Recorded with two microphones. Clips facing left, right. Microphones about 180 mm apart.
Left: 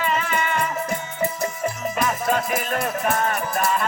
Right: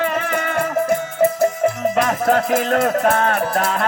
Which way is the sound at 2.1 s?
70° right (ahead or behind).